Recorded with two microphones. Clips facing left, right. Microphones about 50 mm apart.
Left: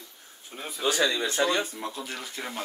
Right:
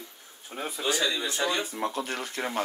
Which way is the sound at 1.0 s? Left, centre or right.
Left.